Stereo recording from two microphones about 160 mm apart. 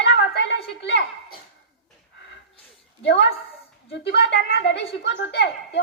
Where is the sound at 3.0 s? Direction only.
90° left.